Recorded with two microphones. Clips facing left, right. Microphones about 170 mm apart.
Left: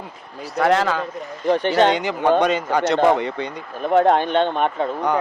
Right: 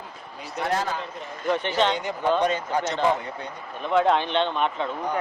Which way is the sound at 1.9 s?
85° left.